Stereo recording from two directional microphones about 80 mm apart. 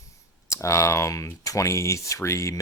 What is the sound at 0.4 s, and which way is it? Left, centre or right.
Speech, left.